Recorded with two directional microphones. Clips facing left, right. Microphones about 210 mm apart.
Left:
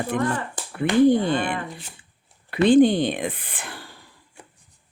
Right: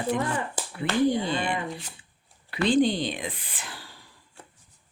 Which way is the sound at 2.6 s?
55° left (ahead or behind).